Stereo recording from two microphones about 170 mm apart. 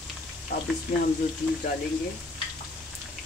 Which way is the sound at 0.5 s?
70° left (ahead or behind).